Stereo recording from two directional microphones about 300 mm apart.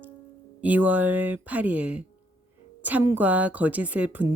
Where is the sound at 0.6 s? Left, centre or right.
Centre.